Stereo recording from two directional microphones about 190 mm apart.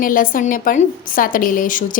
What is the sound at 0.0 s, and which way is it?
A woman's voice, 45° left (ahead or behind).